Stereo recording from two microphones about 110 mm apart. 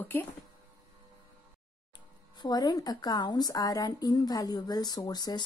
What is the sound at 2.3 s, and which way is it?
A woman's voice, 40° left (ahead or behind).